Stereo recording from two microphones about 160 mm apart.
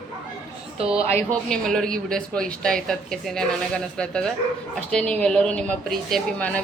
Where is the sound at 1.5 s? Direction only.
5° left (ahead or behind).